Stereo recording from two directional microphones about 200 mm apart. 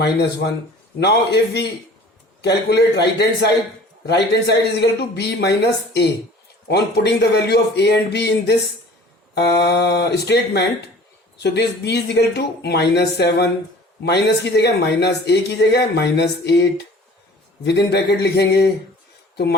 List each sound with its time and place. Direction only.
0.0 s speech: 60° left (ahead or behind)
4.0 s speech: 55° left (ahead or behind)